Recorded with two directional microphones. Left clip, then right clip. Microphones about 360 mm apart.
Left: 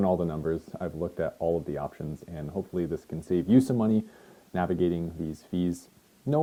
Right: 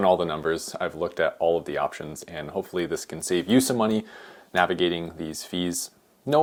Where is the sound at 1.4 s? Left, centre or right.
Right.